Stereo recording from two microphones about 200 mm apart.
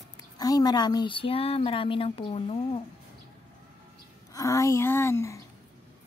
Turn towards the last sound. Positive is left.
turn(degrees=15)  # may be behind; listen again after turning